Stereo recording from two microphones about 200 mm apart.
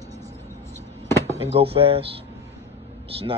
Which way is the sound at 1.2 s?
30° right (ahead or behind).